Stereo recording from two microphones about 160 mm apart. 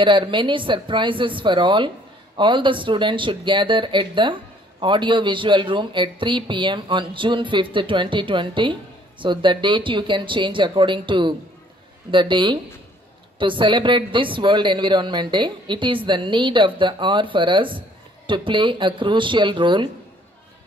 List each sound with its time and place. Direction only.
0.0 s a man's voice: 30° right (ahead or behind)